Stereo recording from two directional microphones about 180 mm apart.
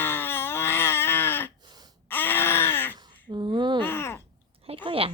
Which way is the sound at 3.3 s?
25° right (ahead or behind).